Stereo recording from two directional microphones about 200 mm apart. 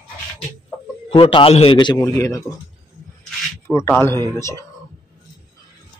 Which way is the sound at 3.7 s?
15° left (ahead or behind).